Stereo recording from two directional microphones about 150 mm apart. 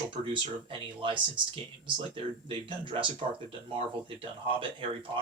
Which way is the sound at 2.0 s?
35° right (ahead or behind).